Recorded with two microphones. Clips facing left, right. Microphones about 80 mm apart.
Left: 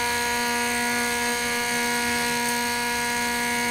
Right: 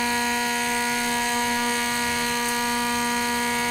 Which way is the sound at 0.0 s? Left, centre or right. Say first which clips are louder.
Right 1 dB; centre.